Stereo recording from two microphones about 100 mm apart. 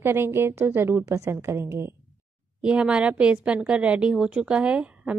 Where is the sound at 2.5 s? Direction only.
10° right (ahead or behind).